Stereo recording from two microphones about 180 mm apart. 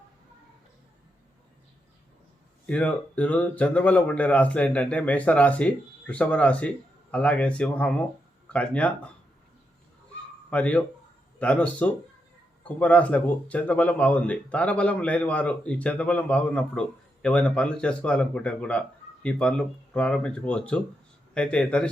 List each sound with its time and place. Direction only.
2.6 s speech: 5° left (ahead or behind)
10.5 s speech: 5° left (ahead or behind)